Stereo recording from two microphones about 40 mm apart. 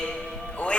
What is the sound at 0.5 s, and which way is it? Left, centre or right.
Music, left.